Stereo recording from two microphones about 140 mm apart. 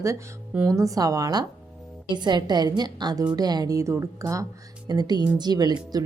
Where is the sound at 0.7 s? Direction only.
25° right (ahead or behind).